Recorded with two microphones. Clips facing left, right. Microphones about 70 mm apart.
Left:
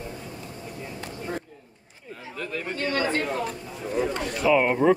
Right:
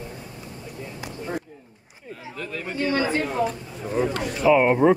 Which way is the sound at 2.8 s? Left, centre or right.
Centre.